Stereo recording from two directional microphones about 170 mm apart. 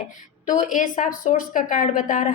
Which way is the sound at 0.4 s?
50° left (ahead or behind).